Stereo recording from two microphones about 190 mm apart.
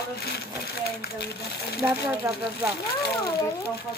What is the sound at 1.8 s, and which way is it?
Speech, 15° right (ahead or behind).